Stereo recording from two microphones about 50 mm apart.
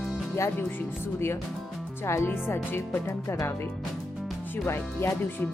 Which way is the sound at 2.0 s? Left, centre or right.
Left.